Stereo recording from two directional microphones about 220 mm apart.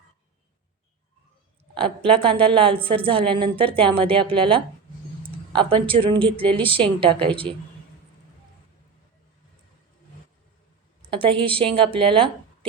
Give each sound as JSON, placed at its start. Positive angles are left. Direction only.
{"t": 1.7, "sound": "a woman's voice", "side_deg": -25}
{"t": 11.1, "sound": "a woman's voice", "side_deg": -25}